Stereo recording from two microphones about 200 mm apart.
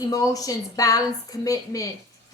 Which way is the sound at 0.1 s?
20° left (ahead or behind).